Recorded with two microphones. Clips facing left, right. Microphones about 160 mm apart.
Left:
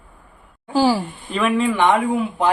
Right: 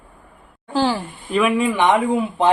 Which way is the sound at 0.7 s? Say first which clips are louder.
Left 3 dB; 10° left (ahead or behind).